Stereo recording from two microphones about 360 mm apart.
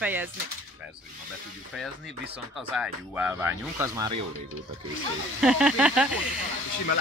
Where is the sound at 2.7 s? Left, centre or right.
Centre.